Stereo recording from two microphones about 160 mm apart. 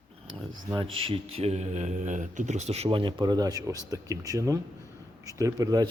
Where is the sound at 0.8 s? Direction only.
35° right (ahead or behind).